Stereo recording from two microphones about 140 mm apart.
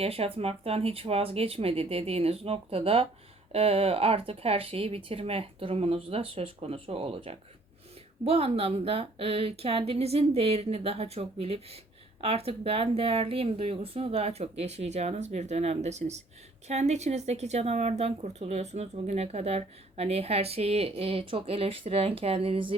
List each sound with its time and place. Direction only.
0.0 s speech: 45° right (ahead or behind)